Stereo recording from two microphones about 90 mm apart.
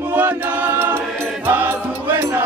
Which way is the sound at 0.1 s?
20° right (ahead or behind).